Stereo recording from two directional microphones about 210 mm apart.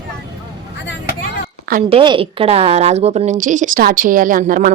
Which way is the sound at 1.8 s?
25° right (ahead or behind).